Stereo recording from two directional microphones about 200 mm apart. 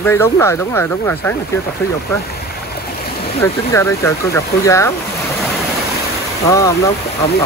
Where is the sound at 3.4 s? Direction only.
15° left (ahead or behind).